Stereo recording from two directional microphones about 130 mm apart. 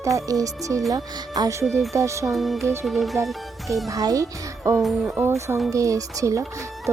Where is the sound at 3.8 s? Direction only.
25° right (ahead or behind).